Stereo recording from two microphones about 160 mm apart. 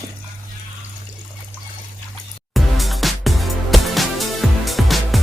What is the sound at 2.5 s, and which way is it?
Music, centre (ahead or behind).